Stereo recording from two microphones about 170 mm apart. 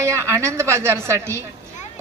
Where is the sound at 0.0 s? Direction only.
15° right (ahead or behind).